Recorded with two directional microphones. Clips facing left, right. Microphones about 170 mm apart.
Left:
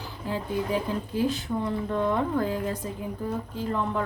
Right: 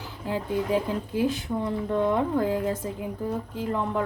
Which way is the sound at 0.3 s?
20° right (ahead or behind).